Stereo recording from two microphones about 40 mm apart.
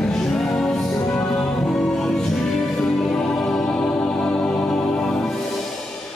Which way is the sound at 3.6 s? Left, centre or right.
Left.